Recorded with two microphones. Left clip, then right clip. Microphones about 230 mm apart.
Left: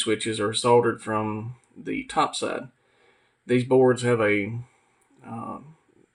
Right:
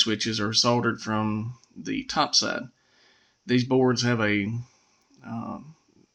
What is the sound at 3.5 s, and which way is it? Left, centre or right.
Speech, right.